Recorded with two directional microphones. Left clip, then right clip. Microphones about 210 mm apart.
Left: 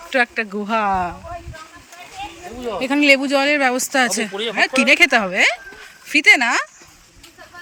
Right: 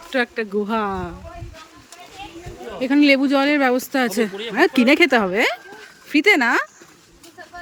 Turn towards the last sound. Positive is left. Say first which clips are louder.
# left 2 dB
turn(degrees=-15)  # may be behind; listen again after turning